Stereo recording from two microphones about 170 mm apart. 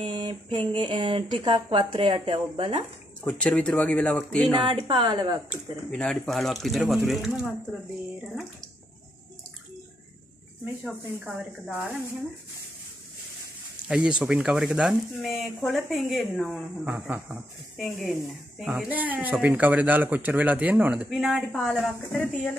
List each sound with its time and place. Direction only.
0.0 s speech: 30° right (ahead or behind)
3.3 s speech: 5° left (ahead or behind)
4.6 s speech: 30° right (ahead or behind)
5.9 s speech: 5° left (ahead or behind)
11.2 s speech: 5° right (ahead or behind)
13.8 s speech: 5° right (ahead or behind)